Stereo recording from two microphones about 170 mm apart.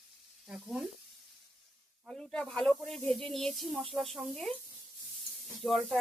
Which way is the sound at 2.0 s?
5° left (ahead or behind).